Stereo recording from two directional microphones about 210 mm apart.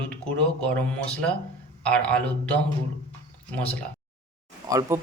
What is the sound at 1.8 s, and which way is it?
Speech, 5° left (ahead or behind).